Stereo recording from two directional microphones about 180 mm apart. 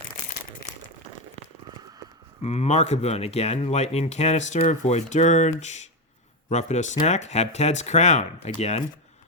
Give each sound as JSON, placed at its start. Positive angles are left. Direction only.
{"t": 2.4, "sound": "speech", "side_deg": 35}